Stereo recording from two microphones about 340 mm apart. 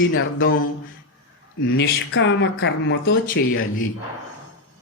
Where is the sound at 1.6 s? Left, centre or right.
Left.